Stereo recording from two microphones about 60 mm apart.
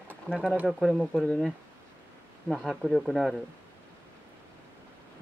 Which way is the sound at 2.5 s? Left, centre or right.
Centre.